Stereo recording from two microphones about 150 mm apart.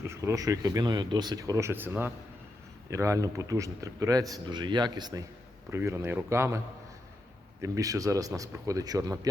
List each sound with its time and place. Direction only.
0.1 s speech: 20° right (ahead or behind)
7.6 s speech: 20° right (ahead or behind)